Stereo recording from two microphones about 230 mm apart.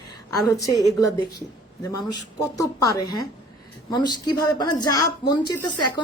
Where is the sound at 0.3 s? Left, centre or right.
Centre.